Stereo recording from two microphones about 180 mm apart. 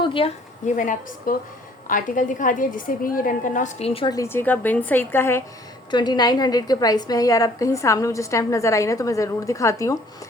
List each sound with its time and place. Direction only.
0.0 s a woman's voice: 30° left (ahead or behind); by 5.4 s 10° left (ahead or behind)
5.9 s a woman's voice: 25° left (ahead or behind)